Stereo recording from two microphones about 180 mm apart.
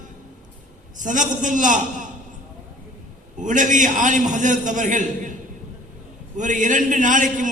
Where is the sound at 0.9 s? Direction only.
45° right (ahead or behind).